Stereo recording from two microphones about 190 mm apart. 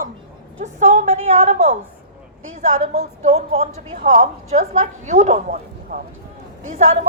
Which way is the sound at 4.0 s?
45° right (ahead or behind).